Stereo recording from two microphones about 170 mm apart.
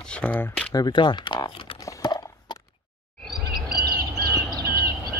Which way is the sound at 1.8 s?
20° left (ahead or behind).